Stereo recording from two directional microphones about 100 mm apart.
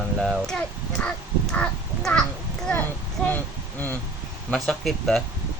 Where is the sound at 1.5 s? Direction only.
5° left (ahead or behind).